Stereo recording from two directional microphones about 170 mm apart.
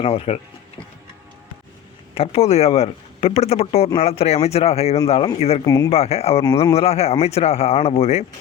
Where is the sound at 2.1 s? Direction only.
35° left (ahead or behind).